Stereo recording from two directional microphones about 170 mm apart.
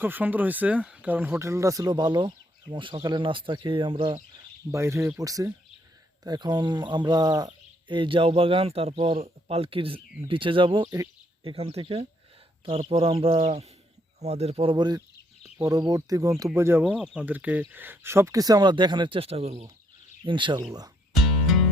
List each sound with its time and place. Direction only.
0.0 s speech: 10° right (ahead or behind); by 4.2 s 30° right (ahead or behind)
4.7 s speech: 15° right (ahead or behind)
11.4 s speech: 35° right (ahead or behind); by 16.8 s 15° right (ahead or behind)
16.8 s speech: 5° right (ahead or behind); by 20.7 s 25° right (ahead or behind)
21.2 s music: centre (ahead or behind)